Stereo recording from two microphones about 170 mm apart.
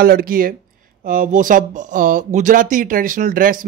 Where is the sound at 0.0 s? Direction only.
60° right (ahead or behind).